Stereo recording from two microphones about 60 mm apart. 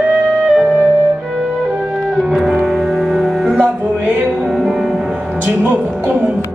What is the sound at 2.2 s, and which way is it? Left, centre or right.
Music, centre.